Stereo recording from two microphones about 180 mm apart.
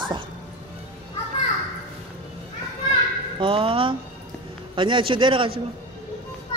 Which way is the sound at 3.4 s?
30° right (ahead or behind).